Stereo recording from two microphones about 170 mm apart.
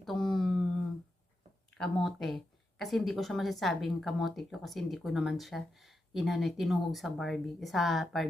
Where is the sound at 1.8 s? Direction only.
5° left (ahead or behind).